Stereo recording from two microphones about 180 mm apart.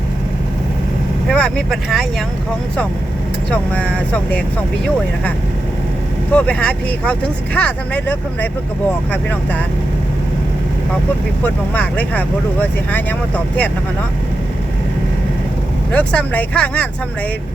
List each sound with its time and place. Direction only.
1.3 s speech: 5° left (ahead or behind)
3.5 s speech: 5° left (ahead or behind)
6.3 s speech: 5° left (ahead or behind)
11.4 s speech: 10° left (ahead or behind)
15.9 s speech: 10° left (ahead or behind)